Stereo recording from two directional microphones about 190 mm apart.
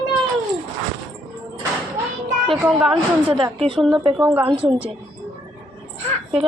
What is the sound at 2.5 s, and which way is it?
Speech, centre (ahead or behind).